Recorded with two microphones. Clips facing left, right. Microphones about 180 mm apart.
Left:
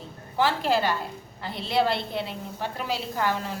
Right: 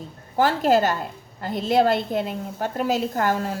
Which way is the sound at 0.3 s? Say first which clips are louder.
Right 5 dB; 45° right (ahead or behind).